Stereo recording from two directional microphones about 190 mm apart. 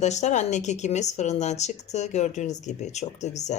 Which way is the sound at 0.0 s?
35° left (ahead or behind).